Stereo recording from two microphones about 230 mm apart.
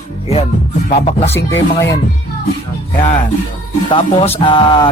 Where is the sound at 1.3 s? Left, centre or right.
Centre.